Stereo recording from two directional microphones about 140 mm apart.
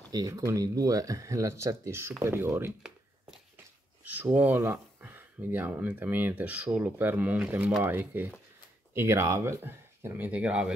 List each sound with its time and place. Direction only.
0.1 s speech: 25° right (ahead or behind)
4.0 s speech: 10° right (ahead or behind)